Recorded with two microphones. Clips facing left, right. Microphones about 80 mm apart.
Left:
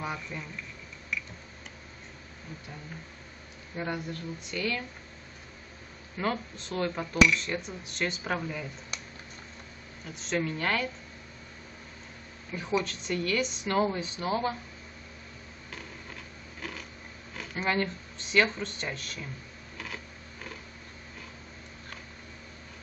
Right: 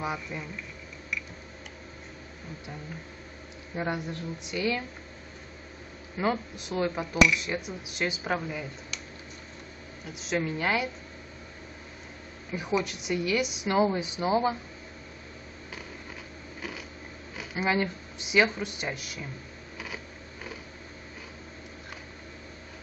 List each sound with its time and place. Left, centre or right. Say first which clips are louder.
0.0 s speech: right 3 dB; centre
3.7 s speech: right 3 dB; centre
6.1 s speech: right 3 dB; centre
10.0 s speech: right 1 dB; centre
12.5 s speech: right 1 dB; centre
17.4 s speech: right 2 dB; centre